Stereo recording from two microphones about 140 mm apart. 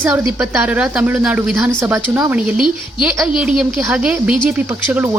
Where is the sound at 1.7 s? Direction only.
15° right (ahead or behind).